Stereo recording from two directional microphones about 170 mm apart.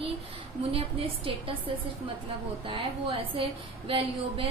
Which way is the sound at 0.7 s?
30° right (ahead or behind).